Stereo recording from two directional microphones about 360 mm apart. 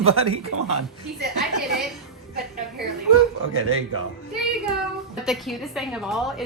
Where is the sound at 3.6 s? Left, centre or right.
Right.